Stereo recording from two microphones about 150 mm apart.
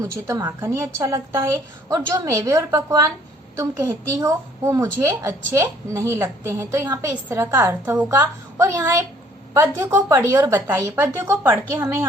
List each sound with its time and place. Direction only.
0.3 s a woman's voice: 20° right (ahead or behind)